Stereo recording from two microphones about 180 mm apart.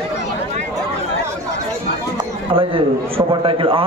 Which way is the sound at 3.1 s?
30° right (ahead or behind).